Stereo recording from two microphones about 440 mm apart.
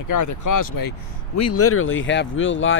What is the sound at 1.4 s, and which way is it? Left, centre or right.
Speech, left.